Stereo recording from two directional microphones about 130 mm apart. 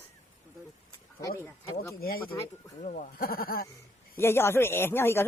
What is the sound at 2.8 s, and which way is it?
Speech, 70° left (ahead or behind).